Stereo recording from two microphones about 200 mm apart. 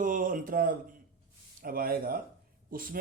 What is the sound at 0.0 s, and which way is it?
Music, 40° right (ahead or behind).